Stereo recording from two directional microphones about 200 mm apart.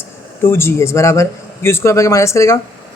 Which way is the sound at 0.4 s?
10° left (ahead or behind).